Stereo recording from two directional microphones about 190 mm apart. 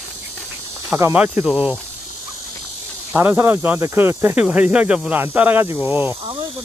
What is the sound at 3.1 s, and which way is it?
Speech, 10° right (ahead or behind).